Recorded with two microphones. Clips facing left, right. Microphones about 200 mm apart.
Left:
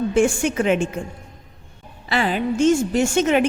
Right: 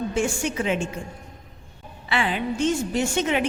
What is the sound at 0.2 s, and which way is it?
Speech, 50° left (ahead or behind).